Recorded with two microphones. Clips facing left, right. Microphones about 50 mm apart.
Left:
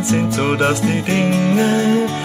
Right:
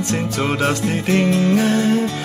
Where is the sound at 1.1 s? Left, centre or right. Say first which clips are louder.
Right 2 dB; left.